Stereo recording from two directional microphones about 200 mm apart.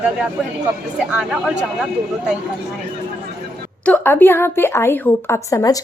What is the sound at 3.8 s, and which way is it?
A woman's voice, 10° left (ahead or behind).